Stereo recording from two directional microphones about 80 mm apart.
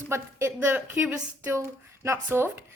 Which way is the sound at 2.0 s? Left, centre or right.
Right.